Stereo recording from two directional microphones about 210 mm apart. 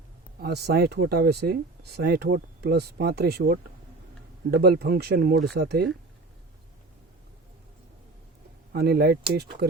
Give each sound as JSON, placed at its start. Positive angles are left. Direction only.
{"t": 0.3, "sound": "speech", "side_deg": -50}
{"t": 8.7, "sound": "speech", "side_deg": -50}